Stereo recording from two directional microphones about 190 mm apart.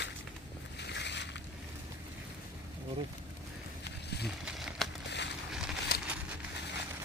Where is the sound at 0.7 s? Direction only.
65° left (ahead or behind).